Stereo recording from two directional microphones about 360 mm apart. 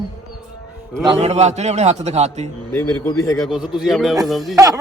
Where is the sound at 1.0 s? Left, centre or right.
Centre.